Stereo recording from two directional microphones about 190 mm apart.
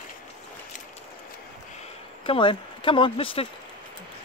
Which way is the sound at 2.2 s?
25° left (ahead or behind).